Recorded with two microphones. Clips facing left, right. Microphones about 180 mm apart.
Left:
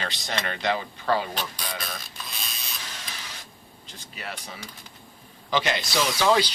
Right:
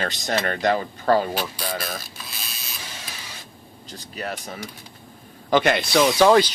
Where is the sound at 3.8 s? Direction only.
40° right (ahead or behind).